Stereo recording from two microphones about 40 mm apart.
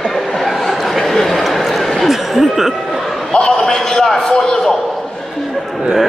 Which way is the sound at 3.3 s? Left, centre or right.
Centre.